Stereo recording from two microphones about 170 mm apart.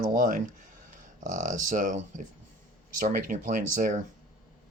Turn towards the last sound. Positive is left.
turn(degrees=-55)  # may be behind; listen again after turning